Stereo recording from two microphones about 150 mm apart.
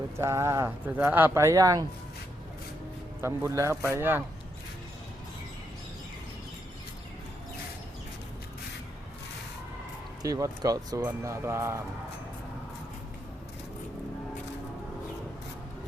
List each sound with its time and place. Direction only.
0.2 s speech: 15° right (ahead or behind)
3.2 s speech: 20° right (ahead or behind)
10.2 s speech: 25° right (ahead or behind)